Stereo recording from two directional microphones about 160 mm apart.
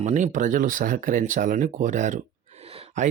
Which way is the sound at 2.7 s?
35° right (ahead or behind).